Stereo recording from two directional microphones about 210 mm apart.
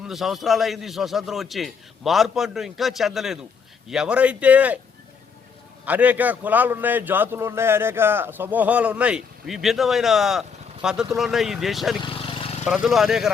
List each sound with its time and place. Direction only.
0.1 s a man's voice: centre (ahead or behind)
5.8 s a man's voice: 5° right (ahead or behind)
12.0 s vehicle: 25° left (ahead or behind)
12.6 s a man's voice: 5° right (ahead or behind)